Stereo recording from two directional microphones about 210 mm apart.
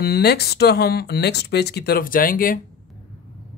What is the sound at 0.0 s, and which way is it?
Speech, 50° left (ahead or behind).